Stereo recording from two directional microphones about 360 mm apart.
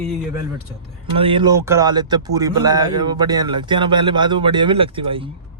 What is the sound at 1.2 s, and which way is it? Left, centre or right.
Speech, centre.